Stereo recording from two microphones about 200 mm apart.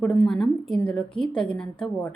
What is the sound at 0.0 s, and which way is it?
A woman's voice, 5° left (ahead or behind).